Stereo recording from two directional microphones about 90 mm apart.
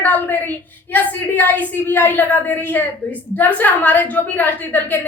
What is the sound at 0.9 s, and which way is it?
A woman's voice, 20° left (ahead or behind).